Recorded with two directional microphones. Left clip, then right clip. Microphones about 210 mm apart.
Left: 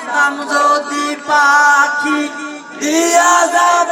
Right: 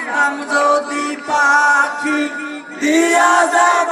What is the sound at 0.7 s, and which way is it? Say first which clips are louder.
Music: left 1 dB; 35° left (ahead or behind).